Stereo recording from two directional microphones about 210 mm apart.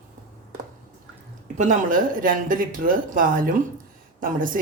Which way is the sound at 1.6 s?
40° right (ahead or behind).